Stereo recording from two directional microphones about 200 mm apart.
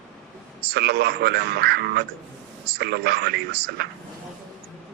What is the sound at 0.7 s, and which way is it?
A man's voice, 55° right (ahead or behind).